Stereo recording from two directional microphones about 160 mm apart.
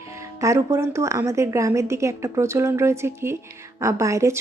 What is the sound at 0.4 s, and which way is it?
A woman's voice, 20° right (ahead or behind).